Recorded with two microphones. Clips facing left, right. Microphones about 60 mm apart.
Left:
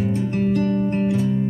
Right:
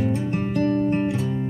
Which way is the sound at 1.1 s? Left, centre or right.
Centre.